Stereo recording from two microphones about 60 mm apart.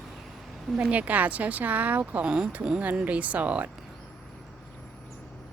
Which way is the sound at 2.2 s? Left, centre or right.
Centre.